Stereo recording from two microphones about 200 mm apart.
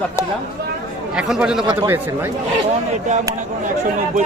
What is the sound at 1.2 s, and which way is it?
Speech, 5° right (ahead or behind).